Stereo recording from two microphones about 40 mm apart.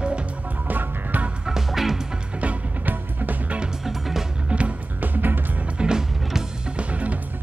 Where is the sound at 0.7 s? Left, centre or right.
Right.